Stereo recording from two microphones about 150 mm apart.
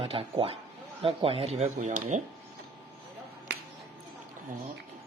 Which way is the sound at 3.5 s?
90° right.